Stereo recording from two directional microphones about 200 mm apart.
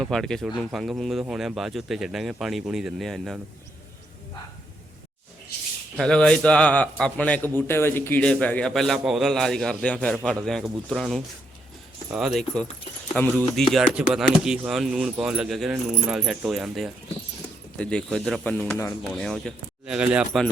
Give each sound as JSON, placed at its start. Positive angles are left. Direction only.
{"t": 0.0, "sound": "a man's voice", "side_deg": 0}
{"t": 6.0, "sound": "a man's voice", "side_deg": 5}